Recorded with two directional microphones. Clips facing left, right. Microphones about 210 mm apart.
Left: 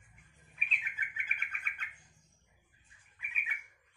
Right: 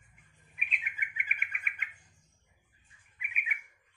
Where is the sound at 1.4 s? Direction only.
10° right (ahead or behind).